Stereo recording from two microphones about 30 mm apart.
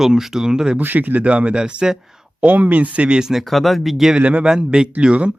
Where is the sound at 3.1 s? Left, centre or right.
Right.